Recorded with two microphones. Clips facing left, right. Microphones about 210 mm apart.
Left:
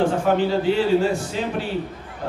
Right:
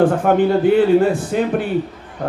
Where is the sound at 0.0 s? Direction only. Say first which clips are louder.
Right 5 dB; 55° right (ahead or behind).